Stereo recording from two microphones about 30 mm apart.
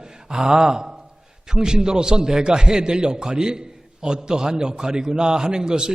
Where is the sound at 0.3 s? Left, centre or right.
Right.